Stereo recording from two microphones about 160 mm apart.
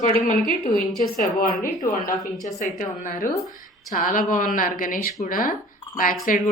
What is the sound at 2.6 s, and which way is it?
A woman's voice, 55° left (ahead or behind).